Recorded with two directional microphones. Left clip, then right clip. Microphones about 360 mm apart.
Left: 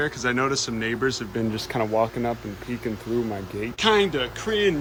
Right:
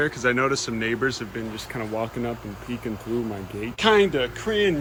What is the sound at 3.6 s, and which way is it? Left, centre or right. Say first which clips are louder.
Speech: right 2 dB; centre.